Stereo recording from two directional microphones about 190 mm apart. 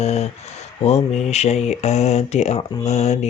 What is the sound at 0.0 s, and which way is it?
Speech, 35° left (ahead or behind).